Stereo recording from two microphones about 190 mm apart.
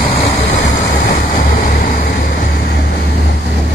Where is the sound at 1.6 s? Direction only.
50° left (ahead or behind).